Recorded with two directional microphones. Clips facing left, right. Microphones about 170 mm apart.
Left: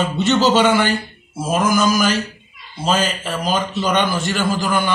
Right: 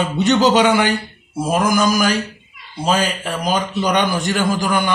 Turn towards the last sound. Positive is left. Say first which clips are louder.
# right 1 dB
turn(degrees=-15)  # may be behind; listen again after turning